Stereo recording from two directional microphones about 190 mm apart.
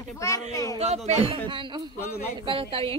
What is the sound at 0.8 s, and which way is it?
Speech, 35° right (ahead or behind).